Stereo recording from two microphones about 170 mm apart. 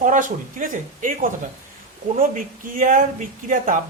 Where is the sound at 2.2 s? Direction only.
50° right (ahead or behind).